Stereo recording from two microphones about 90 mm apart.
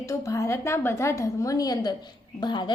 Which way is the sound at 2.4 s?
55° left (ahead or behind).